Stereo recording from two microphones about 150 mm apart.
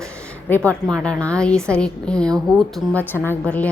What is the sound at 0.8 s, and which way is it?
A woman's voice, 5° left (ahead or behind).